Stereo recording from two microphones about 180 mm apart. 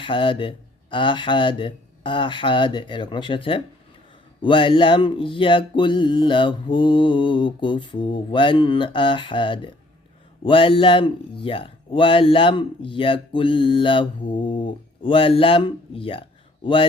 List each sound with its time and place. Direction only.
0.0 s speech: 30° left (ahead or behind)